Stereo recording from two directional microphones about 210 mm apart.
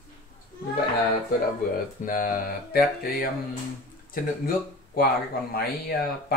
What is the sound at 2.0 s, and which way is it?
Speech, 40° left (ahead or behind).